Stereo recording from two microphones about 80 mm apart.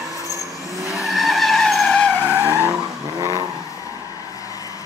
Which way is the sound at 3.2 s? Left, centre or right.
Right.